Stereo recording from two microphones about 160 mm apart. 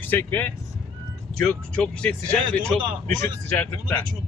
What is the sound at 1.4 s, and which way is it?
Speech, 5° left (ahead or behind).